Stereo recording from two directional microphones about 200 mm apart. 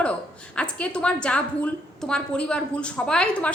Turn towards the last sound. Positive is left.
turn(degrees=5)  # may be behind; listen again after turning